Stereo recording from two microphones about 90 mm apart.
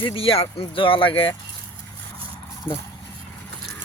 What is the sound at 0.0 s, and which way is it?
Speech, 85° left.